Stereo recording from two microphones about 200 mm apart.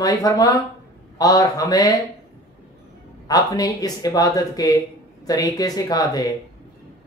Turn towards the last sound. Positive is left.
turn(degrees=20)  # may be behind; listen again after turning